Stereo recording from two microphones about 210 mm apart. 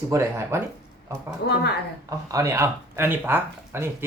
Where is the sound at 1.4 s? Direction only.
50° left (ahead or behind).